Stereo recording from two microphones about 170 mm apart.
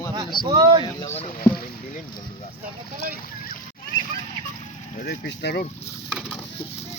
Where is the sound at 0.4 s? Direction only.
25° right (ahead or behind).